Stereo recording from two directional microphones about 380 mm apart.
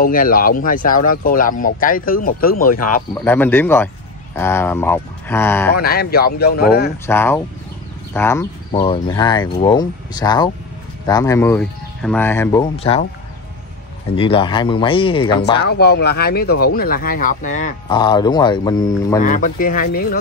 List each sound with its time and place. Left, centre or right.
0.0 s speech: left
3.2 s speech: centre
5.7 s speech: left
7.1 s speech: centre
14.1 s speech: centre
15.5 s speech: left; by 19.2 s centre
19.2 s speech: left